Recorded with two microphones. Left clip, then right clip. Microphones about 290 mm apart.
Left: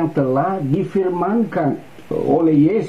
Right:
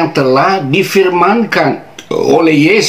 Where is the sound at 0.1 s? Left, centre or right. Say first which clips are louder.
Right 9 dB; centre.